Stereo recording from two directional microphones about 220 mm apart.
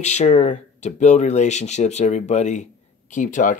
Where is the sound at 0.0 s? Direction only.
30° left (ahead or behind).